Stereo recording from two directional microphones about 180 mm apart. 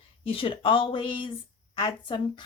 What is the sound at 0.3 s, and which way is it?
A woman's voice, 30° left (ahead or behind).